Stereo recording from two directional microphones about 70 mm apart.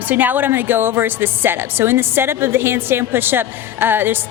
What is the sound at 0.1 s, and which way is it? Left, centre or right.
A woman's voice, right.